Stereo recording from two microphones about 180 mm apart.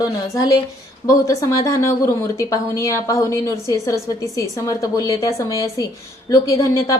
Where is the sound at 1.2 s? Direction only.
20° left (ahead or behind).